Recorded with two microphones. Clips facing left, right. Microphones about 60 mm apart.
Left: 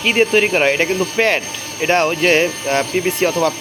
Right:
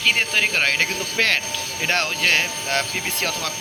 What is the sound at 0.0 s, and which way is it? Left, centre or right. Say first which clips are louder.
Speech: left 7 dB; centre.